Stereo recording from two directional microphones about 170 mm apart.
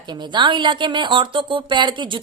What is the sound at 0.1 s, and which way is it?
Speech, 25° right (ahead or behind).